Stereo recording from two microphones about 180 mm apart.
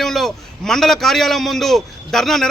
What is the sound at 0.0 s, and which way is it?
A man's voice, centre (ahead or behind).